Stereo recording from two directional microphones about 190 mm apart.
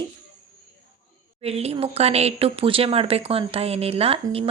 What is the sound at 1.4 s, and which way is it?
A woman's voice, 30° right (ahead or behind).